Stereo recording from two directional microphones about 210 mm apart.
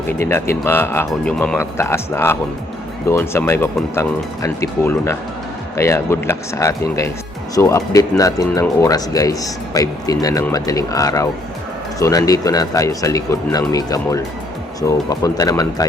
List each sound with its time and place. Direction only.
0.2 s speech: 10° left (ahead or behind)